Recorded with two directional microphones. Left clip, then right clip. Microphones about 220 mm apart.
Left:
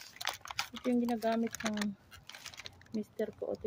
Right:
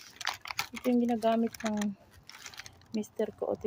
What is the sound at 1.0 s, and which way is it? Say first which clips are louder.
Speech: right 6 dB; 25° right (ahead or behind).